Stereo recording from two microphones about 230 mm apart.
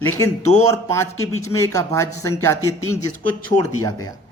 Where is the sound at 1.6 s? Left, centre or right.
Centre.